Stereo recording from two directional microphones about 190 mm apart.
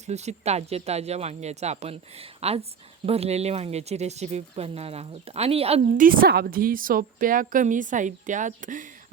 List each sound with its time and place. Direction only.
0.0 s speech: 35° right (ahead or behind)
6.0 s a woman's voice: 50° right (ahead or behind)